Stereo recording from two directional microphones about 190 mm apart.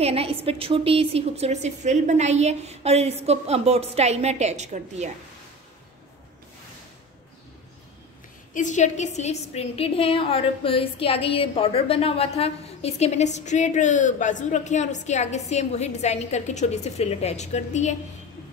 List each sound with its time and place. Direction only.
0.0 s a woman's voice: 30° right (ahead or behind)
8.5 s a woman's voice: 40° left (ahead or behind)